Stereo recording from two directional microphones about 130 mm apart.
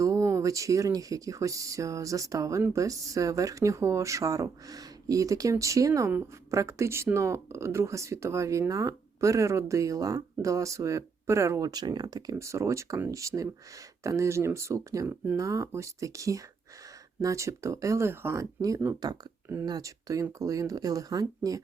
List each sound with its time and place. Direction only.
0.0 s speech: 25° right (ahead or behind)